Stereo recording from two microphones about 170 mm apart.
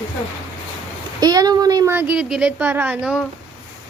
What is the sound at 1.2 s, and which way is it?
Speech, 20° right (ahead or behind).